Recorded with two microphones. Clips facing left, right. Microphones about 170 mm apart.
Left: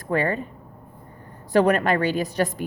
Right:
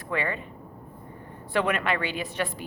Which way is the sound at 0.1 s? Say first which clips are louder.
Left 7 dB; 40° left (ahead or behind).